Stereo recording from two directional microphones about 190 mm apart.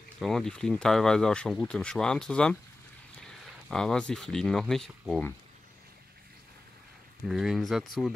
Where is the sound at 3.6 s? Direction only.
5° left (ahead or behind).